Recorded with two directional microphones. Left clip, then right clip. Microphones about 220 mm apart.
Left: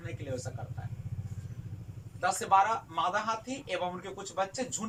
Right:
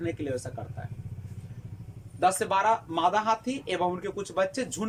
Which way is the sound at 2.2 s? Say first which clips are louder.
Right 2 dB; 45° right (ahead or behind).